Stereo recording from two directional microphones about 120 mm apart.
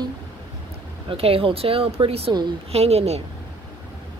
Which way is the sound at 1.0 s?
50° right (ahead or behind).